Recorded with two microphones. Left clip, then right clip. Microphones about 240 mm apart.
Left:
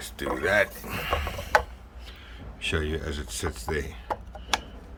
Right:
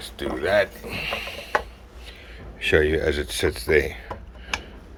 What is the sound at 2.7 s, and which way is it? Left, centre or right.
Speech, centre.